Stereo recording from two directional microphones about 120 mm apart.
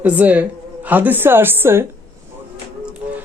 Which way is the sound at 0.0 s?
15° right (ahead or behind).